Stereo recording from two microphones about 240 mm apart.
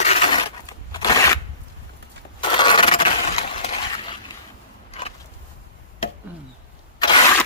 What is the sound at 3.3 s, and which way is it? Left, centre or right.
Crushing, left.